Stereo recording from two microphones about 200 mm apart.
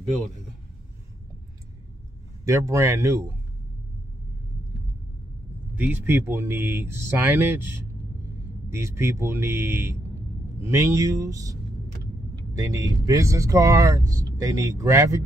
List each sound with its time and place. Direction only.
2.4 s speech: 15° right (ahead or behind)
5.8 s speech: 10° right (ahead or behind)
12.5 s speech: 15° right (ahead or behind)